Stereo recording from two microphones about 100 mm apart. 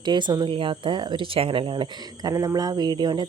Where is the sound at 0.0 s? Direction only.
50° right (ahead or behind).